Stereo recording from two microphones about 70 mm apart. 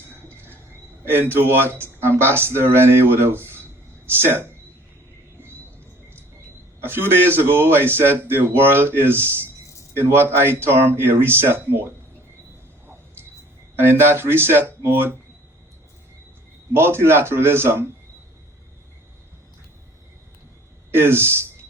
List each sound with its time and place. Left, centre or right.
1.1 s speech: right
6.8 s speech: right
13.7 s speech: right
16.7 s speech: right
20.9 s speech: right